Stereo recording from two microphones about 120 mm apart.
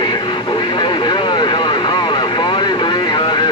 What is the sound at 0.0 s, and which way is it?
Vehicle, 40° left (ahead or behind).